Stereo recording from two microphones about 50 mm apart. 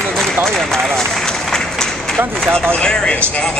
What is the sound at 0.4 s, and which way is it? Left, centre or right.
Run, centre.